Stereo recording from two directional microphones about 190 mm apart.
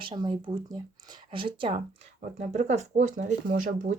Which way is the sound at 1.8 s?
40° right (ahead or behind).